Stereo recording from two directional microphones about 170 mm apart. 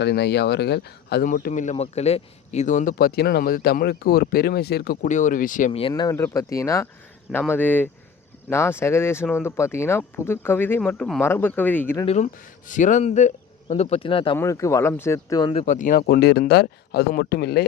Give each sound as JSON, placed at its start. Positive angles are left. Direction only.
{"t": 0.0, "sound": "speech", "side_deg": 80}
{"t": 1.3, "sound": "speech", "side_deg": 50}
{"t": 1.7, "sound": "speech", "side_deg": 40}
{"t": 5.0, "sound": "speech", "side_deg": 45}
{"t": 5.9, "sound": "speech", "side_deg": 20}
{"t": 12.0, "sound": "speech", "side_deg": 40}
{"t": 14.3, "sound": "speech", "side_deg": 15}
{"t": 15.5, "sound": "speech", "side_deg": 50}